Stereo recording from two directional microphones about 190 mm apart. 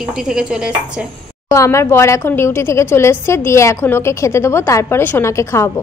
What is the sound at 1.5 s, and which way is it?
Speech, 15° left (ahead or behind).